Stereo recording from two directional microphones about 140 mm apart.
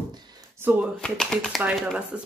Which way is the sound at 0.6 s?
10° right (ahead or behind).